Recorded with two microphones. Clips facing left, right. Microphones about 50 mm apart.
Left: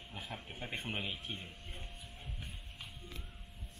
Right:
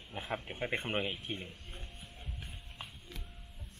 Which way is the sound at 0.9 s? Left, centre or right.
Centre.